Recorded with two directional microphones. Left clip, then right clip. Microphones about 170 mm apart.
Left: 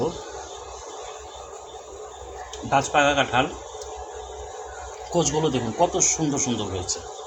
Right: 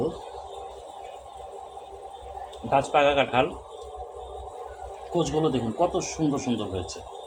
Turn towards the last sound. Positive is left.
turn(degrees=-10)  # may be behind; listen again after turning